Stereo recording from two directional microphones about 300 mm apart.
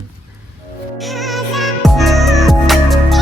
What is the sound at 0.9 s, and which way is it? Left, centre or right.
Music, centre.